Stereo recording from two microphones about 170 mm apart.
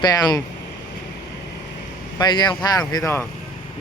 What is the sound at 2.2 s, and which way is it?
Speech, 25° left (ahead or behind).